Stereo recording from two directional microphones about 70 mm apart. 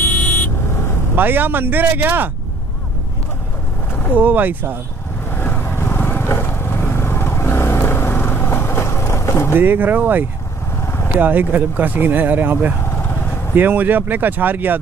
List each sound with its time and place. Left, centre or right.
0.0 s vehicle: left
1.1 s speech: right
4.1 s speech: right
5.3 s vehicle: left
9.6 s speech: right
12.9 s vehicle: left
13.6 s speech: right